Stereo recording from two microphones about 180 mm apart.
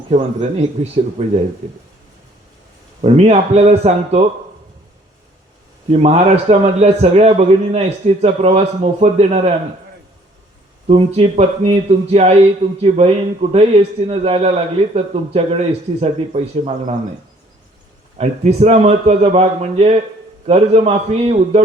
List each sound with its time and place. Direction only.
0.1 s a man's voice: 35° right (ahead or behind)
3.0 s a man's voice: 40° right (ahead or behind)
5.9 s a man's voice: 40° right (ahead or behind)
10.8 s a man's voice: 35° right (ahead or behind)
18.2 s a man's voice: 35° right (ahead or behind)